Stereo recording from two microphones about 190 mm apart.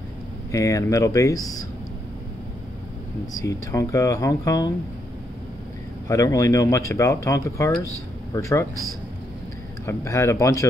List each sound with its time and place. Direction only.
0.5 s speech: 15° left (ahead or behind)
3.4 s speech: 15° left (ahead or behind)
6.0 s speech: 15° left (ahead or behind)
9.8 s speech: 15° left (ahead or behind)